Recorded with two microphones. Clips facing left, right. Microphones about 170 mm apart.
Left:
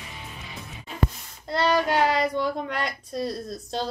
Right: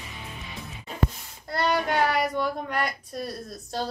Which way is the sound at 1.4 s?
20° left (ahead or behind).